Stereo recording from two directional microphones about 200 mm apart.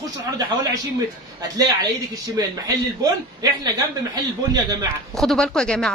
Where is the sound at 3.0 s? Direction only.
20° right (ahead or behind).